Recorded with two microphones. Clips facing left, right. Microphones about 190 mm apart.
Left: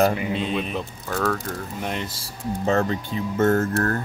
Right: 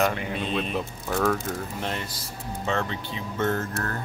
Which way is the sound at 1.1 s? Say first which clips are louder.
Even; 10° right (ahead or behind).